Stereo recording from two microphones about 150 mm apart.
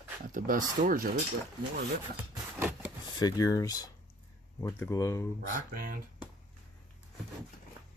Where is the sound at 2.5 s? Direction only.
15° right (ahead or behind).